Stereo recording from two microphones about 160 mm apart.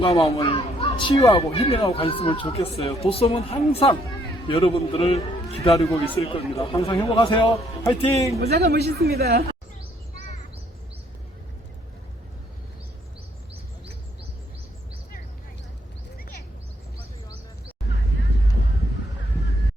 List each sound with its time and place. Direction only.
0.0 s speech: 40° left (ahead or behind)
0.5 s children playing: 35° left (ahead or behind)
1.2 s speech: 20° left (ahead or behind)
1.5 s speech: 40° left (ahead or behind)
5.7 s speech: 20° left (ahead or behind)
6.2 s speech: 40° left (ahead or behind)
7.9 s speech: 20° left (ahead or behind)
8.4 s a woman's voice: 85° right